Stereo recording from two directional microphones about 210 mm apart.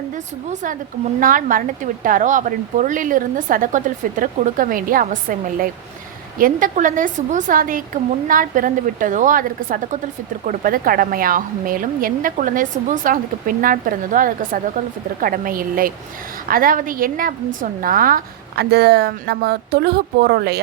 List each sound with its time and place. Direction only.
0.5 s a woman's voice: 40° right (ahead or behind)